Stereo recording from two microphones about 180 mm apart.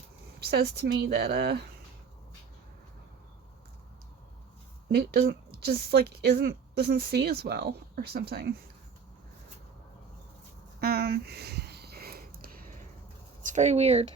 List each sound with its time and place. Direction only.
0.4 s a woman's voice: 70° right (ahead or behind)
4.9 s a woman's voice: 60° right (ahead or behind)
10.8 s a sound: 60° right (ahead or behind)
13.4 s speech: 45° right (ahead or behind)